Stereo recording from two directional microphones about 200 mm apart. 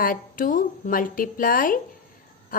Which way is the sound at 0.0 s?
45° left (ahead or behind).